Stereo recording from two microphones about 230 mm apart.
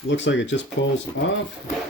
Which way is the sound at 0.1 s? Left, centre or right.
Left.